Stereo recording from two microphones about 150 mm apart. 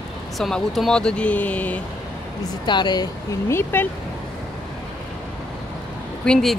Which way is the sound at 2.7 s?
30° left (ahead or behind).